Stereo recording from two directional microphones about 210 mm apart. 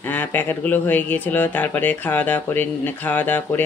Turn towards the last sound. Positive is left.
turn(degrees=10)  # may be behind; listen again after turning